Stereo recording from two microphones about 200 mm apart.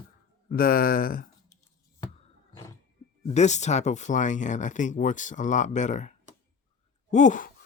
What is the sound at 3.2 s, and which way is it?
Speech, 35° left (ahead or behind).